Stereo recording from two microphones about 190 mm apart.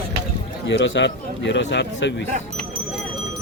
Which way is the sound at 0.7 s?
70° left (ahead or behind).